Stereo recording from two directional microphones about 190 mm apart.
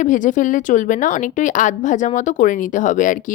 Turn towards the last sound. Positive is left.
turn(degrees=40)  # may be behind; listen again after turning